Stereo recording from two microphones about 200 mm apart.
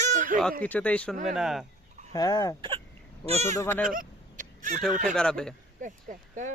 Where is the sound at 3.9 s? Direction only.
40° right (ahead or behind).